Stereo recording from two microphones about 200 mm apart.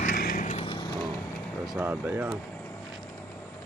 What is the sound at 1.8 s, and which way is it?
Speech, 10° right (ahead or behind).